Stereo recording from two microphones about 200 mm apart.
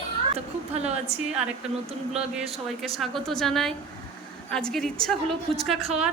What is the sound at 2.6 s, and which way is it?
A woman's voice, centre (ahead or behind).